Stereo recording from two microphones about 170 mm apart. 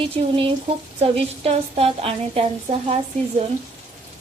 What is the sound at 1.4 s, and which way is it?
A woman's voice, 35° right (ahead or behind).